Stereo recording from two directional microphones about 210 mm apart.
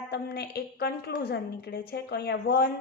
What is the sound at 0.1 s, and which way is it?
A woman's voice, 50° left (ahead or behind).